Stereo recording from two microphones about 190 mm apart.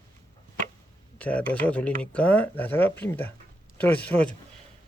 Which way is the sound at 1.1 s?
10° left (ahead or behind).